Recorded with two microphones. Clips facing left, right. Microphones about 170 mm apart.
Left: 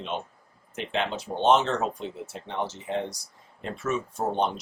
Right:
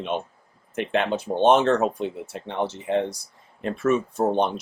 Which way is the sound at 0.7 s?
55° right (ahead or behind).